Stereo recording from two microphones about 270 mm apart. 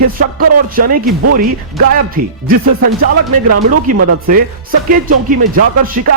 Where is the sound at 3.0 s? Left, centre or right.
Right.